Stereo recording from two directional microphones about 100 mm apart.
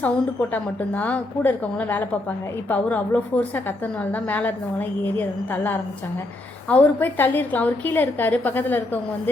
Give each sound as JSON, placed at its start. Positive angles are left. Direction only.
{"t": 0.0, "sound": "a woman's voice", "side_deg": 15}
{"t": 6.7, "sound": "a woman's voice", "side_deg": 15}